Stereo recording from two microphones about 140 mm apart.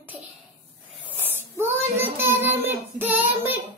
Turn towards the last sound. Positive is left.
turn(degrees=-15)  # may be behind; listen again after turning